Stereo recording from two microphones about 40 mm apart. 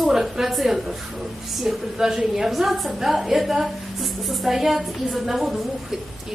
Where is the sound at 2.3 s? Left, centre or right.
Centre.